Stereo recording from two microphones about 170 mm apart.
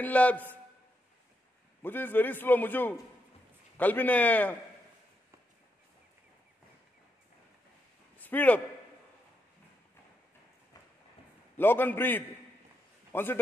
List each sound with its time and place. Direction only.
0.0 s a man's voice: 10° left (ahead or behind)
1.8 s a man's voice: 10° left (ahead or behind)
8.2 s a man's voice: 10° left (ahead or behind)
11.5 s a man's voice: 10° left (ahead or behind)